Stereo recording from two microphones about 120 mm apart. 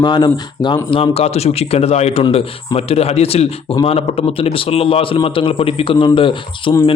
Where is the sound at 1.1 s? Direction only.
60° left (ahead or behind).